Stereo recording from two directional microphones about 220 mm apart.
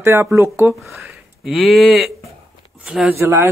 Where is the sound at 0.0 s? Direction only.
15° right (ahead or behind).